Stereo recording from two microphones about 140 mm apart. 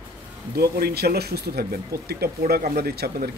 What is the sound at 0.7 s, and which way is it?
Speech, 90° right.